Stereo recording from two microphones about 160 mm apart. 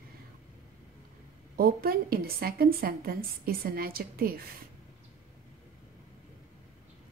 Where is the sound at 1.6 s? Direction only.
65° right (ahead or behind).